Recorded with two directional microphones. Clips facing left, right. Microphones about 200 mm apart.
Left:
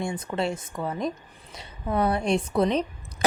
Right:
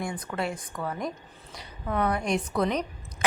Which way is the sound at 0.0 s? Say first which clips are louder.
Left 3 dB; 25° left (ahead or behind).